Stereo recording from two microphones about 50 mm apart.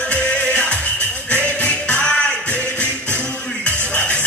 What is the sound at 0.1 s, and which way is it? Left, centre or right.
Music, left.